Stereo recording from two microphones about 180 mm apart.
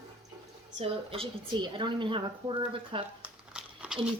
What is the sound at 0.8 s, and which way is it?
A woman's voice, 30° right (ahead or behind).